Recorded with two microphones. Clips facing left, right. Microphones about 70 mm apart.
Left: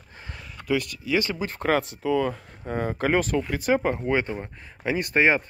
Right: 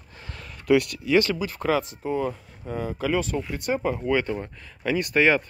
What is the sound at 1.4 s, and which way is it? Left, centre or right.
Speech, left.